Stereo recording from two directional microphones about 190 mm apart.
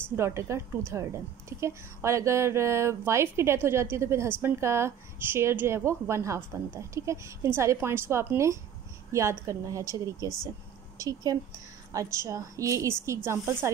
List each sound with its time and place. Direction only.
0.1 s a woman's voice: 15° right (ahead or behind)